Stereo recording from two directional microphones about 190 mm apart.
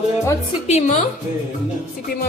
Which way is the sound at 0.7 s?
40° left (ahead or behind).